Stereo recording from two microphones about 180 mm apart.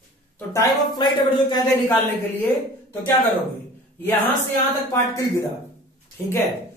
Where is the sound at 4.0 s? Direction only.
10° left (ahead or behind).